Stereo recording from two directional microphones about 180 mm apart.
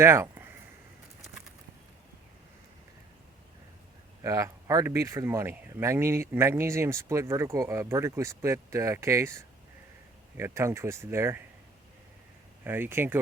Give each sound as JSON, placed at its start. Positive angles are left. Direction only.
{"t": 0.0, "sound": "a sound", "side_deg": -15}
{"t": 4.2, "sound": "speech", "side_deg": -15}
{"t": 12.6, "sound": "speech", "side_deg": -10}